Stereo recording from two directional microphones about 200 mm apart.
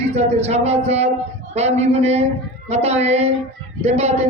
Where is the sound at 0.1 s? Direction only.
30° right (ahead or behind).